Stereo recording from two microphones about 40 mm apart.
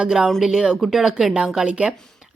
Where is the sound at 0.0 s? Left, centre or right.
Centre.